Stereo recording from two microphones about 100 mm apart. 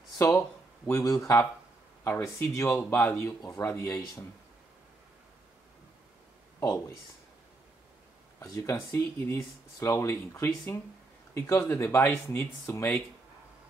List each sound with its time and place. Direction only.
0.2 s a sound: 25° left (ahead or behind)
1.1 s speech: 35° left (ahead or behind)
8.4 s speech: 30° left (ahead or behind)